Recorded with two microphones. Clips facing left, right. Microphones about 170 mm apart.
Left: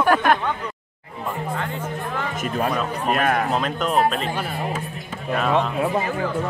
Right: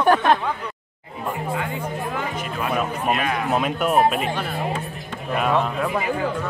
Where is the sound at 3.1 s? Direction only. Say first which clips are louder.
Left 5 dB; 50° left (ahead or behind).